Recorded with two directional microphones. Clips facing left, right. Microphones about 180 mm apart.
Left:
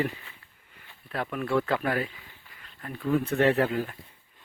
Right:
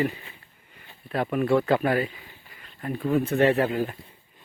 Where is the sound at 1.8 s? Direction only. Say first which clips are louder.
Right 5 dB; 10° right (ahead or behind).